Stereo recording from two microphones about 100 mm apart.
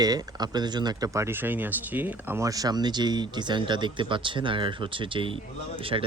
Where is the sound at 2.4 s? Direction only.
35° right (ahead or behind).